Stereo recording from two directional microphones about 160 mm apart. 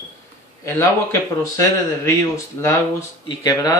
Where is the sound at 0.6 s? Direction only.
20° left (ahead or behind).